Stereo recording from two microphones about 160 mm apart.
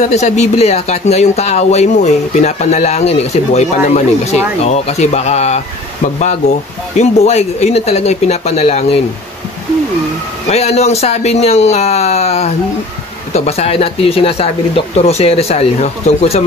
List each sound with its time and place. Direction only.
0.0 s speech: 45° left (ahead or behind)
7.0 s speech: 45° left (ahead or behind)
10.5 s speech: 40° left (ahead or behind)